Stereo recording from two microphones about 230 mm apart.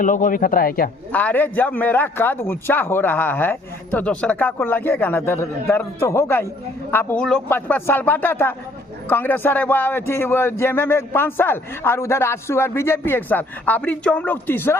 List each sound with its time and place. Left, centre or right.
0.0 s a man's voice: left
1.1 s a man's voice: centre